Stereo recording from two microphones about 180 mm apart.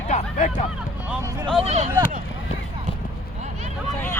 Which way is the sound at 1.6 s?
40° right (ahead or behind).